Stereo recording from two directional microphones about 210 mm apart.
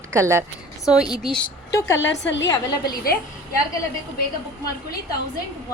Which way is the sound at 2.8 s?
45° left (ahead or behind).